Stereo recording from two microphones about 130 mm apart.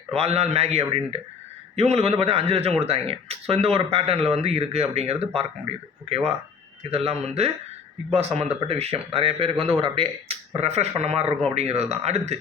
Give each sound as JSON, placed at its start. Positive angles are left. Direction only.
{"t": 0.1, "sound": "speech", "side_deg": -55}